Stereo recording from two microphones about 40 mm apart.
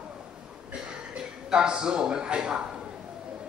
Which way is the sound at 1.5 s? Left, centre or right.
Centre.